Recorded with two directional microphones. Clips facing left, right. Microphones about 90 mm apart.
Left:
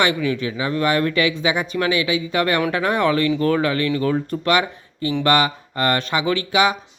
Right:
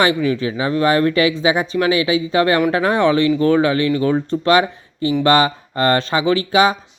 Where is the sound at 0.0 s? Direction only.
30° right (ahead or behind).